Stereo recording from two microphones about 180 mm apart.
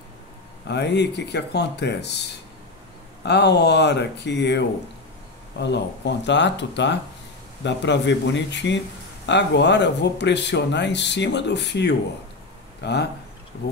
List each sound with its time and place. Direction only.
0.7 s speech: 70° left (ahead or behind)
3.3 s speech: 70° left (ahead or behind)